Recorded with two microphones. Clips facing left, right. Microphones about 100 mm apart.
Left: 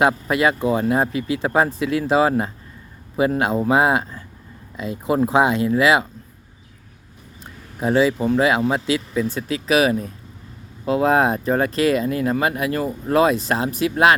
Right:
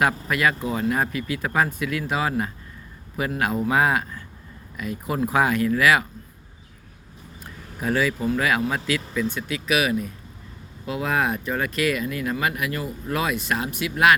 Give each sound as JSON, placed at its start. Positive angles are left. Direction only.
{"t": 0.0, "sound": "speech", "side_deg": 25}
{"t": 7.8, "sound": "speech", "side_deg": 25}